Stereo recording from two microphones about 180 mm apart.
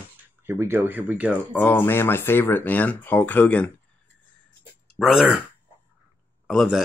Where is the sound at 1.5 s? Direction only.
10° left (ahead or behind).